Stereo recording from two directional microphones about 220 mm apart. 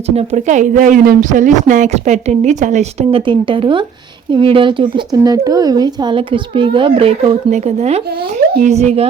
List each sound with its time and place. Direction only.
0.2 s speech: 30° right (ahead or behind)